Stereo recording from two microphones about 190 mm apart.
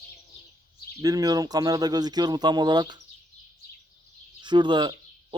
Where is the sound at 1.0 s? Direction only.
20° right (ahead or behind).